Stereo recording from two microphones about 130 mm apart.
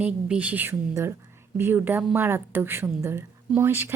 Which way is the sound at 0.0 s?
10° right (ahead or behind).